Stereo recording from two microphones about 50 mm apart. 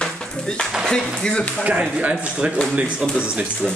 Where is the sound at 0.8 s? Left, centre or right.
Centre.